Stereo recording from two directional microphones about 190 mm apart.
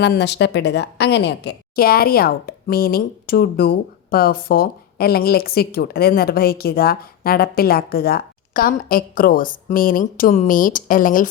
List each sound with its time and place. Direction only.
0.0 s a woman's voice: 60° left (ahead or behind)